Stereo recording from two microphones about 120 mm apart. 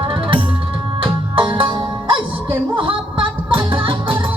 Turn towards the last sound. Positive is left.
turn(degrees=-45)  # may be behind; listen again after turning